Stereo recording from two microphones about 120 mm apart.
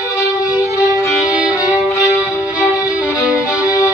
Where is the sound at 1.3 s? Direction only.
10° right (ahead or behind).